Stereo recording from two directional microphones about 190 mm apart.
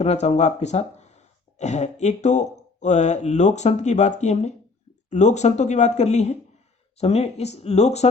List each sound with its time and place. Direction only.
0.0 s speech: 35° left (ahead or behind)